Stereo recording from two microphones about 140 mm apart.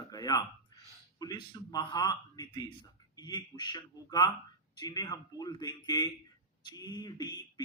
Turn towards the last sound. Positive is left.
turn(degrees=30)  # may be behind; listen again after turning